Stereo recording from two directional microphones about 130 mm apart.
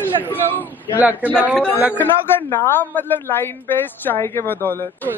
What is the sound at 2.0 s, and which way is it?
A woman's voice, 15° left (ahead or behind).